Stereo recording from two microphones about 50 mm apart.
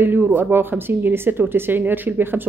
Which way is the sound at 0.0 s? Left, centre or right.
Right.